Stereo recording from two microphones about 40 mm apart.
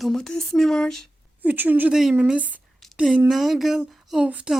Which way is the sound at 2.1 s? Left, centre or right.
Right.